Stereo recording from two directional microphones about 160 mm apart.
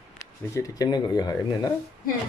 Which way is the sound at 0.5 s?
25° left (ahead or behind).